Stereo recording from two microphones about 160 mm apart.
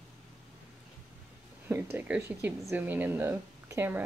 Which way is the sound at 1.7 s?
15° right (ahead or behind).